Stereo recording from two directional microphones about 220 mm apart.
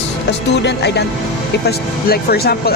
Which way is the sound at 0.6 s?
50° left (ahead or behind).